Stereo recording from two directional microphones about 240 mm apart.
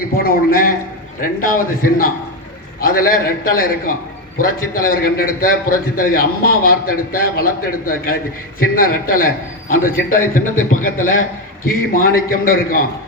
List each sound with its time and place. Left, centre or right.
0.2 s a man's voice: left